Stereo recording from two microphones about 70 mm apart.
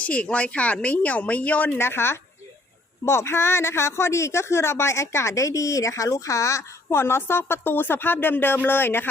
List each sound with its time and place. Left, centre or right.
0.0 s a man's voice: centre